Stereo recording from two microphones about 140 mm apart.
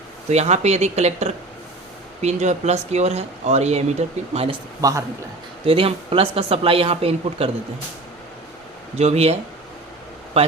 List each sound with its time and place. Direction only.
0.3 s speech: 50° right (ahead or behind)
4.8 s a man's voice: 25° right (ahead or behind)
5.6 s speech: 40° right (ahead or behind)
9.0 s speech: 50° right (ahead or behind)